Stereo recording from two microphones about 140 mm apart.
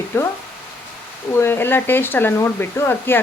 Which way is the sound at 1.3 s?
15° left (ahead or behind).